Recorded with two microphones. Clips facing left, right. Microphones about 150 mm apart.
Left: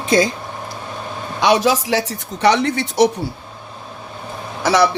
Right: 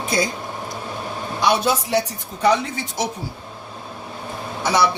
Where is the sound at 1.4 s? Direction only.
90° left; by 3.1 s 70° left (ahead or behind).